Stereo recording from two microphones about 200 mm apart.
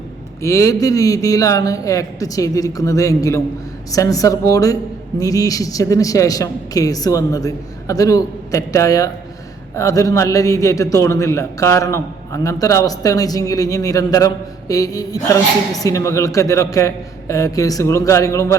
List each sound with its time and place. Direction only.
0.4 s a man's voice: 15° left (ahead or behind)